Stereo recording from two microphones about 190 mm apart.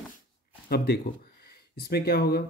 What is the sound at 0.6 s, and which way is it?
Speech, 55° left (ahead or behind).